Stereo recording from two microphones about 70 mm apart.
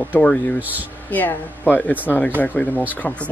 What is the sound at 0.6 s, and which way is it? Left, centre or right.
Speech, right.